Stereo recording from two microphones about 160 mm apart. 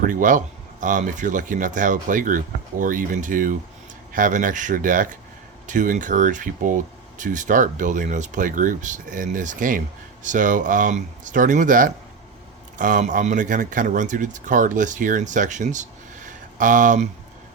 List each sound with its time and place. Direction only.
0.0 s speech: 55° right (ahead or behind)